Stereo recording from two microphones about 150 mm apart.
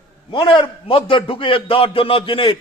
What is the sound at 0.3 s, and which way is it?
A man's voice, 30° left (ahead or behind).